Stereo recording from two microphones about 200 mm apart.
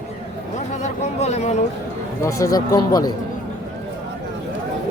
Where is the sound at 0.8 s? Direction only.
35° left (ahead or behind).